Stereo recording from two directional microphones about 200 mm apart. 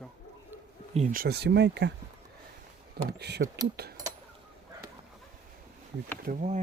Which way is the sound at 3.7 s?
55° right (ahead or behind).